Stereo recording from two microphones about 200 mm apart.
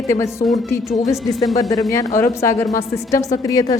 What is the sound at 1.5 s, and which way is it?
A woman's voice, 20° left (ahead or behind).